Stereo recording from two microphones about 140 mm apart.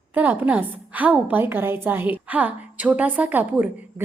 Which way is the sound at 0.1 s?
10° right (ahead or behind).